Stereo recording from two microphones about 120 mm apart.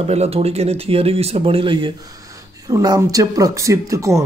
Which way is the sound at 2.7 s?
30° right (ahead or behind).